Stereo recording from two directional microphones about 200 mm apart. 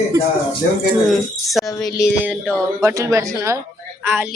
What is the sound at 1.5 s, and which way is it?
Speech, centre (ahead or behind).